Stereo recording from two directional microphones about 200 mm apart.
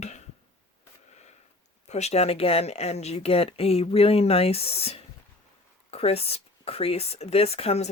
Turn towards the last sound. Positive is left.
turn(degrees=30)  # may be behind; listen again after turning